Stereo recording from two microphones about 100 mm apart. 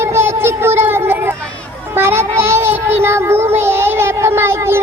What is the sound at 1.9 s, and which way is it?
Child singing, 25° right (ahead or behind).